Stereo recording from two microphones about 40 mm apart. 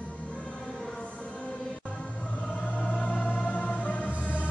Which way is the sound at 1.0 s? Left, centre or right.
Left.